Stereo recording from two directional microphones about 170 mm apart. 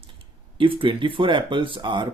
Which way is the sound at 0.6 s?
30° right (ahead or behind).